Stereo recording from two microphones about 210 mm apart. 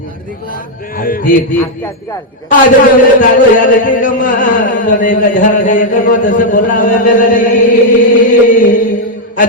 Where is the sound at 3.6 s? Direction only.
40° left (ahead or behind).